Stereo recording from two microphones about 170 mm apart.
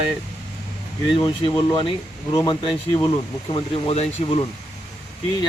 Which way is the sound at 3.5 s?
40° left (ahead or behind).